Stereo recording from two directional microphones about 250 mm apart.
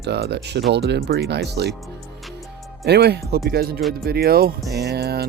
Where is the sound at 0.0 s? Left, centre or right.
Right.